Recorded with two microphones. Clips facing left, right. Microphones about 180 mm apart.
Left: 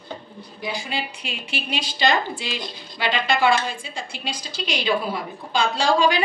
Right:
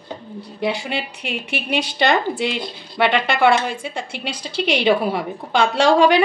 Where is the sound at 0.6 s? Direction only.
65° right (ahead or behind).